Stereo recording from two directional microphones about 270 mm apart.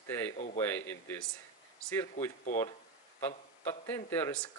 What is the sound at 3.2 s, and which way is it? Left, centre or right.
Speech, centre.